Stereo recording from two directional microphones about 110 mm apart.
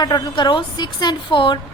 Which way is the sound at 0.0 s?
40° left (ahead or behind).